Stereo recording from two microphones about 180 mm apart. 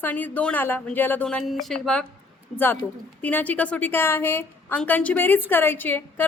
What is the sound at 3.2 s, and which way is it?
A woman's voice, 10° left (ahead or behind).